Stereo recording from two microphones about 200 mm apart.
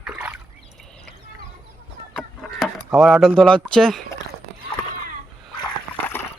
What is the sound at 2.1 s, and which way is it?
Chicken, centre (ahead or behind).